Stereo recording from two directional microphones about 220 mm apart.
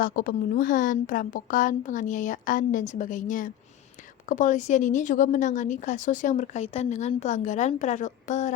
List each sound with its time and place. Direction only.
0.0 s a woman's voice: 40° left (ahead or behind)